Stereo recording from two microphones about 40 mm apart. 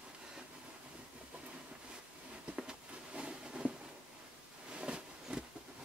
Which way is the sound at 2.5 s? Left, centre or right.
Right.